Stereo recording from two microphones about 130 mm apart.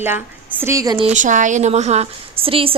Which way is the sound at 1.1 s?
75° right (ahead or behind).